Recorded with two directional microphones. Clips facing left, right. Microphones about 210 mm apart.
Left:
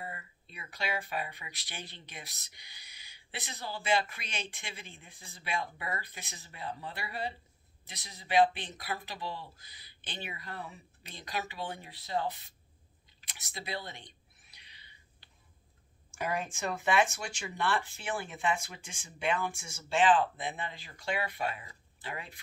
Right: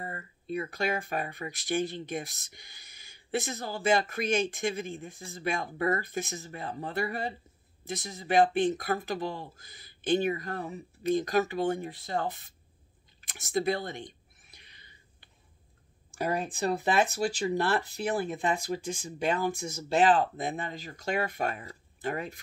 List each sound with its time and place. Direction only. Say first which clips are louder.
0.0 s speech: right 4 dB; 45° right (ahead or behind)
13.2 s a sound: right 17 dB; 45° right (ahead or behind)
16.1 s speech: right 4 dB; 35° right (ahead or behind)